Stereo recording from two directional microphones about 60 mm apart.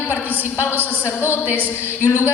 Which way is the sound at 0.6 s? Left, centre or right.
Left.